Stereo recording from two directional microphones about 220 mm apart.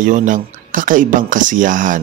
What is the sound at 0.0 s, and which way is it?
Speech, 35° right (ahead or behind).